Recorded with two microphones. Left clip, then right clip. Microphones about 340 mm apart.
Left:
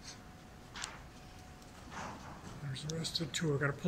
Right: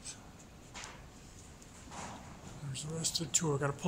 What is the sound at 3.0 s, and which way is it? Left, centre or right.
Speech, centre.